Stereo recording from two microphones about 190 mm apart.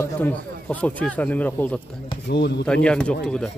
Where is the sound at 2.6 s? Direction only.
5° left (ahead or behind).